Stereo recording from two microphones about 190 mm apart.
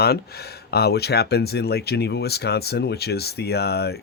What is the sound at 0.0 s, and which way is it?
Speech, 55° left (ahead or behind).